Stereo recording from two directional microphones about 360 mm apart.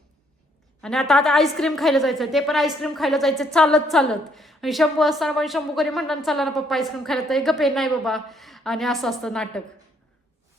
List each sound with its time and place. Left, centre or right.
0.8 s a woman's voice: centre